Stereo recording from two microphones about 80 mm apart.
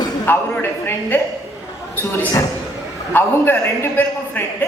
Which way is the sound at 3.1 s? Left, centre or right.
Left.